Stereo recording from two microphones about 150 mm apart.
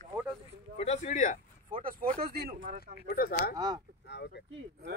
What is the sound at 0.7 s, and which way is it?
Speech, 50° left (ahead or behind).